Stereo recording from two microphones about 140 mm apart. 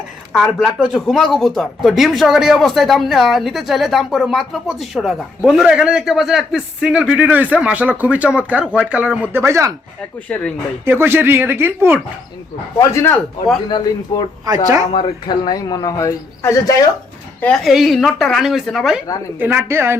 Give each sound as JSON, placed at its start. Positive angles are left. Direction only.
{"t": 0.3, "sound": "speech", "side_deg": 0}
{"t": 9.4, "sound": "speech", "side_deg": -20}
{"t": 10.8, "sound": "speech", "side_deg": -15}
{"t": 12.8, "sound": "speech", "side_deg": 20}
{"t": 13.7, "sound": "a man's voice", "side_deg": 35}
{"t": 14.4, "sound": "speech", "side_deg": -25}
{"t": 14.9, "sound": "speech", "side_deg": 35}
{"t": 17.4, "sound": "speech", "side_deg": 5}
{"t": 19.4, "sound": "speech", "side_deg": -15}